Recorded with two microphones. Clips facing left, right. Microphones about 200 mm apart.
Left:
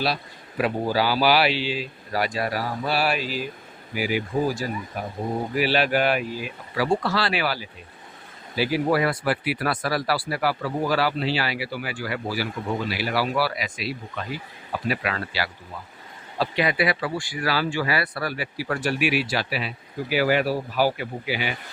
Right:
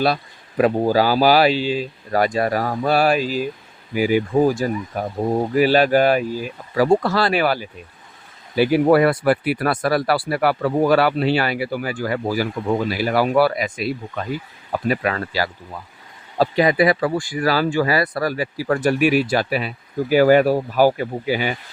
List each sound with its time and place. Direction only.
0.0 s speech: 50° right (ahead or behind)